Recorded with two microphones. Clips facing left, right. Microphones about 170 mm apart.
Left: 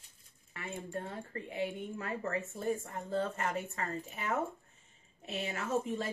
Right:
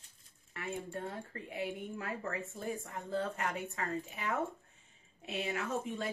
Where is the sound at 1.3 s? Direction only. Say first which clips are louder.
Left 2 dB; centre (ahead or behind).